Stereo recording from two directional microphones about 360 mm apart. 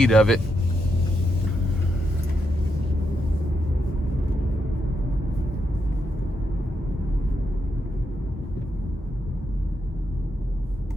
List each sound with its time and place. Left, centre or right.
0.0 s speech: centre